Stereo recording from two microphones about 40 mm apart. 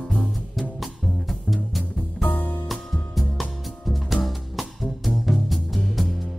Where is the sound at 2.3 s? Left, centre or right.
Left.